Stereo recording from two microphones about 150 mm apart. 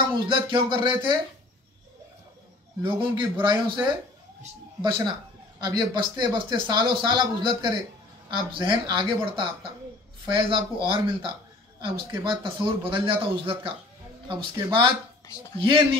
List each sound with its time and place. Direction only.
0.1 s a man's voice: 30° right (ahead or behind)
2.8 s a man's voice: 35° right (ahead or behind)